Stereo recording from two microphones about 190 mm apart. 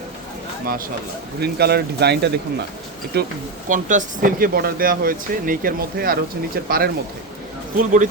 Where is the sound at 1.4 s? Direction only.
55° right (ahead or behind).